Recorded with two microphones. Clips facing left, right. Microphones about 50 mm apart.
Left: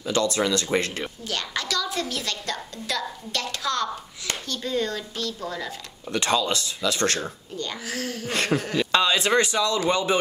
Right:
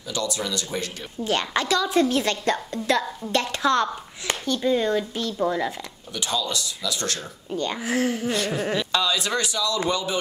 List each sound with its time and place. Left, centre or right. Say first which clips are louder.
0.1 s speech: left 5 dB; left
1.2 s a woman's voice: right 9 dB; right
6.1 s speech: left 4 dB; left
7.5 s a woman's voice: right 8 dB; right
8.3 s speech: left 1 dB; left
8.9 s speech: left 7 dB; left